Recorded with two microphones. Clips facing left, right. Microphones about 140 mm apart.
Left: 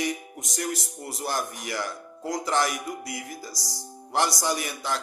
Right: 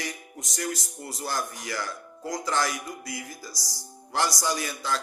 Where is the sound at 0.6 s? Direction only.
20° left (ahead or behind).